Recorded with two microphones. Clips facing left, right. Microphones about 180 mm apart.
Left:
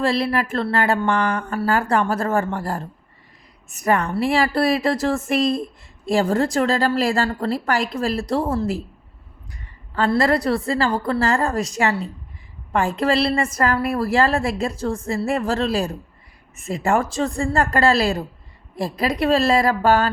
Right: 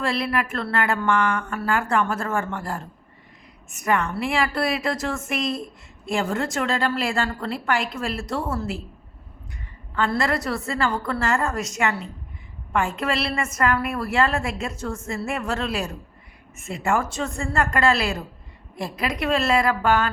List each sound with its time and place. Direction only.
0.0 s a woman's voice: 30° left (ahead or behind)
9.9 s a woman's voice: 35° left (ahead or behind)